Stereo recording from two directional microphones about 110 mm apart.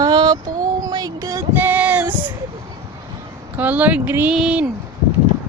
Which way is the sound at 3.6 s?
15° right (ahead or behind).